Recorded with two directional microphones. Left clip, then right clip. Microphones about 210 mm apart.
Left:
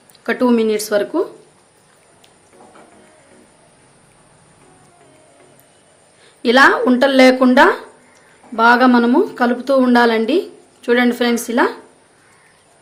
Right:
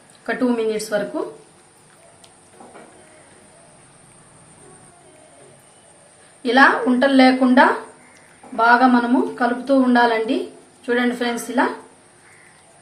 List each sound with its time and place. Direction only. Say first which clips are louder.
0.3 s a woman's voice: left 5 dB; 45° left (ahead or behind)
6.4 s a woman's voice: left 3 dB; 50° left (ahead or behind)